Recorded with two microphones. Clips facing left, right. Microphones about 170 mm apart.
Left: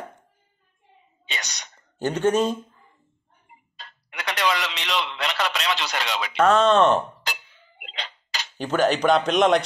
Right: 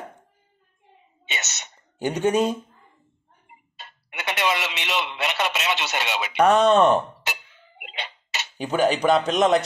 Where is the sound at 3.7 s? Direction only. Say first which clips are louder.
Right 1 dB; 5° right (ahead or behind).